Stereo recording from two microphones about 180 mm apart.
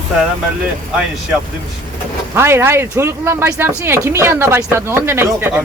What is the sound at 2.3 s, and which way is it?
Speech, 15° right (ahead or behind).